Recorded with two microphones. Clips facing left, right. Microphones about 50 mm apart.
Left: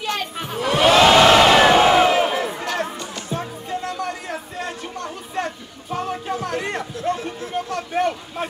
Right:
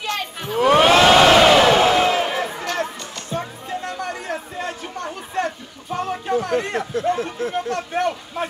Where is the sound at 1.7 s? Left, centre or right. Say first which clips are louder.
Left 1 dB; centre.